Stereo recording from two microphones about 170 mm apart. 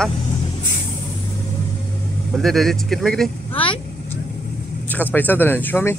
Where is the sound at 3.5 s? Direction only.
30° left (ahead or behind).